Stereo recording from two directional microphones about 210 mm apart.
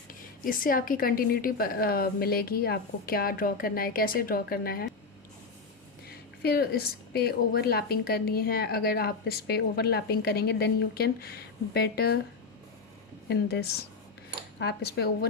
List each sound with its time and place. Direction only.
0.4 s speech: 40° left (ahead or behind)
6.1 s speech: 45° left (ahead or behind)
13.2 s speech: 50° left (ahead or behind)